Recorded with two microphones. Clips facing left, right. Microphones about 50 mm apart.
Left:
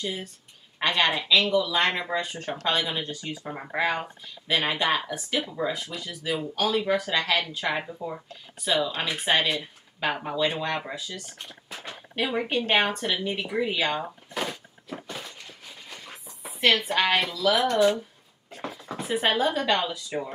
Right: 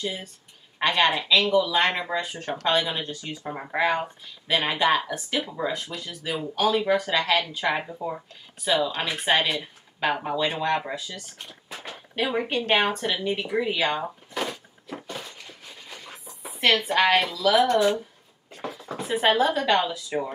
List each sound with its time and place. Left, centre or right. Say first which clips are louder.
0.0 s speech: right 1 dB; centre
1.4 s speech: right 2 dB; centre
1.7 s speech: right 1 dB; centre
15.1 s a sound: right 1 dB; centre
16.8 s speech: right 3 dB; centre